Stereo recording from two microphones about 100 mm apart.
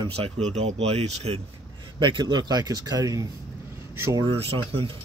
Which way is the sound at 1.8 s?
50° right (ahead or behind).